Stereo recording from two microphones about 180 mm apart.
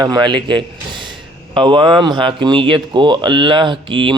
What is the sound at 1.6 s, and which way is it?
Speech, 25° right (ahead or behind).